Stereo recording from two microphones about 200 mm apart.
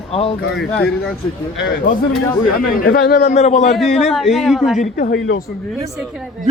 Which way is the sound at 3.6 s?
Centre (ahead or behind).